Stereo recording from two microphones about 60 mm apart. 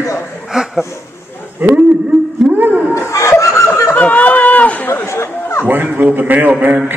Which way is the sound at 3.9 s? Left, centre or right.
Left.